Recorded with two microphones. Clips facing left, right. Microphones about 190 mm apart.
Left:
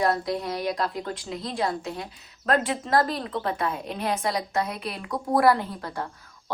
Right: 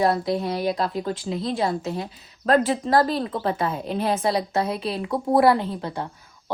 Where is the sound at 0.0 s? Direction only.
25° right (ahead or behind).